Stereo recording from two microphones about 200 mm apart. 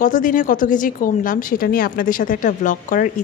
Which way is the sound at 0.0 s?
40° left (ahead or behind).